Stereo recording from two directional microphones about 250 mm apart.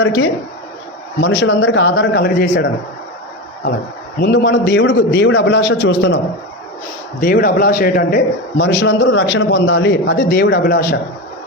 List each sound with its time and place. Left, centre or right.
0.0 s a man's voice: left
4.2 s a man's voice: left
7.2 s a man's voice: left